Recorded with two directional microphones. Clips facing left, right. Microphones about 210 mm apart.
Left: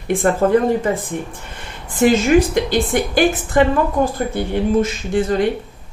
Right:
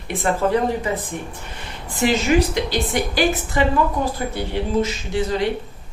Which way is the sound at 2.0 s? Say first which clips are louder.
Left 5 dB; 50° left (ahead or behind).